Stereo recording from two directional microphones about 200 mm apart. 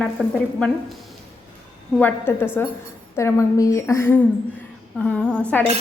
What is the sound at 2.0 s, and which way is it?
A woman's voice, 10° left (ahead or behind).